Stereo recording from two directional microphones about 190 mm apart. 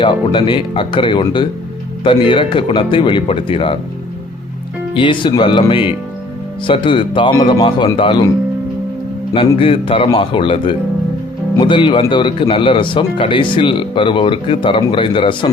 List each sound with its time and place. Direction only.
0.0 s speech: 25° left (ahead or behind)
4.9 s speech: 25° left (ahead or behind)
9.6 s speech: 30° left (ahead or behind)